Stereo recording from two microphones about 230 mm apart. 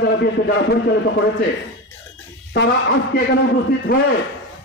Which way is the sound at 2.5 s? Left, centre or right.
Left.